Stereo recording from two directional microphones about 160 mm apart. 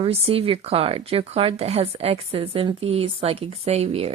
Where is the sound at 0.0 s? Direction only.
35° right (ahead or behind).